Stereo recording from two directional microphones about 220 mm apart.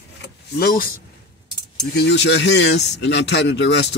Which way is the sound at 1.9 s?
50° left (ahead or behind).